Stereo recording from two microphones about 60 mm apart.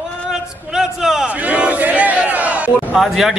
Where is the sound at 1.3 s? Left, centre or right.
Right.